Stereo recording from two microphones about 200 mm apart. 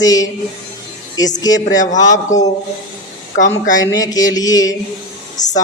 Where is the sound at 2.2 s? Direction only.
35° left (ahead or behind).